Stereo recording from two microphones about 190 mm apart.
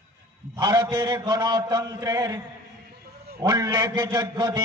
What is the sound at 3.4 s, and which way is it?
A man's voice, 20° right (ahead or behind).